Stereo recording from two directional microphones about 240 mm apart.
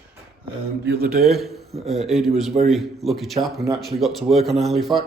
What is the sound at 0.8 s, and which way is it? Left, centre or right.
Speech, right.